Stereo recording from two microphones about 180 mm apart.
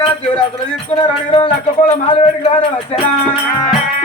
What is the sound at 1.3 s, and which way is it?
Speech, 30° left (ahead or behind).